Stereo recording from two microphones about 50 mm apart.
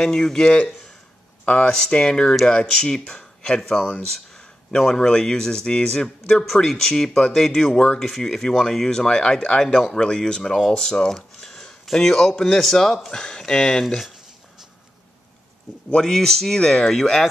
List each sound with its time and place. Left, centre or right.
0.0 s speech: centre
2.9 s speech: centre
8.0 s speech: centre
15.9 s speech: centre